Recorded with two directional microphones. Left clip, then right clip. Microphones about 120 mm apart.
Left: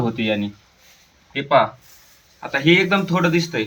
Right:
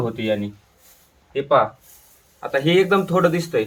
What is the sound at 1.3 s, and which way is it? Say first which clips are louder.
Speech: left 1 dB; 35° right (ahead or behind).